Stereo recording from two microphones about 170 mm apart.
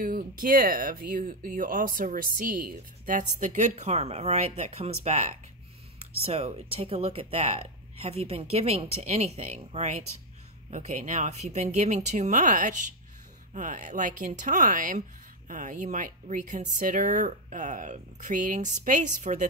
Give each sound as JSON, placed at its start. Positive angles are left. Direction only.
{"t": 0.0, "sound": "speech", "side_deg": -55}